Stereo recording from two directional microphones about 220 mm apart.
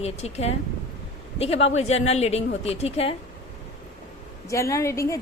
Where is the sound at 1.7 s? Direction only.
30° left (ahead or behind).